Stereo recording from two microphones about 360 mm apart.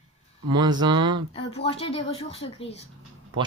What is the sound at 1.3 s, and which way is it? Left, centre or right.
Speech, centre.